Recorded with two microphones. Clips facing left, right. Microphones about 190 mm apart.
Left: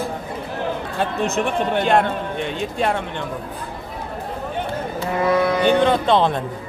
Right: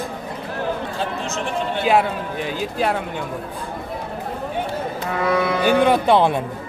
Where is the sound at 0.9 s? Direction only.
60° left (ahead or behind).